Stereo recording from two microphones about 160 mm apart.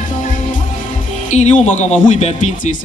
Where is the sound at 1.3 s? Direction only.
50° left (ahead or behind).